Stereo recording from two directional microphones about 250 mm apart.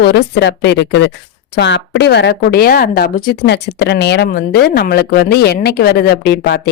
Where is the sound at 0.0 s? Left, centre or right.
Left.